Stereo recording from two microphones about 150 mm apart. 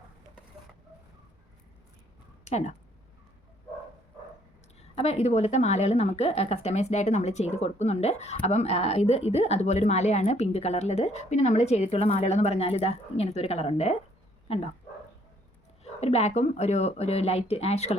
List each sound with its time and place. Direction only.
2.4 s speech: 50° left (ahead or behind)
4.8 s a woman's voice: 45° left (ahead or behind)
15.8 s a woman's voice: 45° left (ahead or behind)